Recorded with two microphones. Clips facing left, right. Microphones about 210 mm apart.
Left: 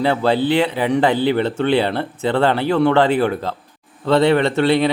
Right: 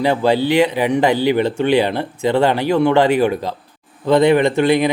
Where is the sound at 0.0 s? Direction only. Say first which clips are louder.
Right 1 dB; 15° right (ahead or behind).